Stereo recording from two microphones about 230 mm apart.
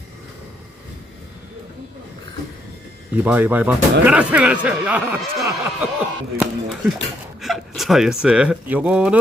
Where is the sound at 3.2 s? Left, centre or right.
Centre.